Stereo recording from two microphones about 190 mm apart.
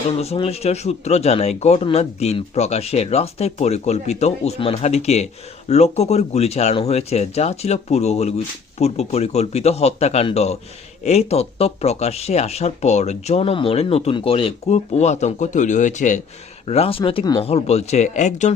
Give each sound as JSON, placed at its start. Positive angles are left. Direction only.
{"t": 0.2, "sound": "speech", "side_deg": 30}